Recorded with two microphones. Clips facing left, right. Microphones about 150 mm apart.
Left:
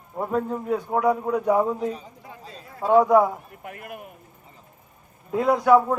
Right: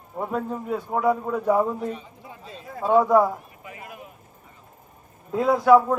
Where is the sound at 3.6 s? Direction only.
60° left (ahead or behind).